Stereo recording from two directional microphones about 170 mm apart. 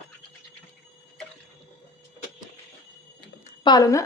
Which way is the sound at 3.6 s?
25° left (ahead or behind).